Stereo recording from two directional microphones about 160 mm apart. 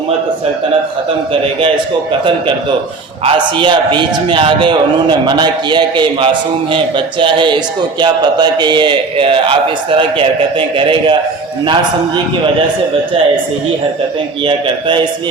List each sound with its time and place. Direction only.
3.2 s a man's voice: 30° right (ahead or behind)
14.4 s a man's voice: 30° right (ahead or behind)